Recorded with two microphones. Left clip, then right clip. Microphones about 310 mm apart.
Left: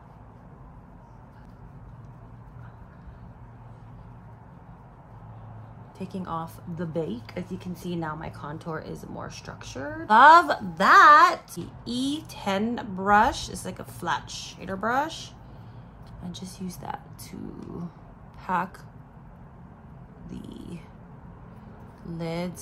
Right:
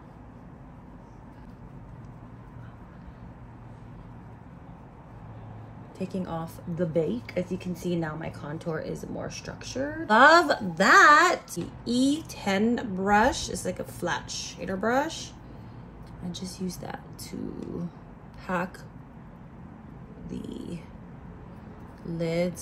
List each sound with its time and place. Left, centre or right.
5.9 s a woman's voice: centre
20.2 s a woman's voice: centre
22.0 s a woman's voice: centre